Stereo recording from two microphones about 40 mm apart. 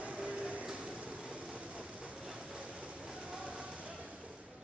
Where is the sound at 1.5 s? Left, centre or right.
Right.